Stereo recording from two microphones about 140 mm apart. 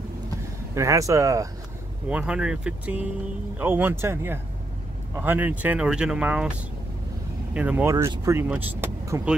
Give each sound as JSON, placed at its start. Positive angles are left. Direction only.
{"t": 0.7, "sound": "speech", "side_deg": -25}
{"t": 2.0, "sound": "speech", "side_deg": -10}
{"t": 7.5, "sound": "speech", "side_deg": -10}
{"t": 7.9, "sound": "speech", "side_deg": -25}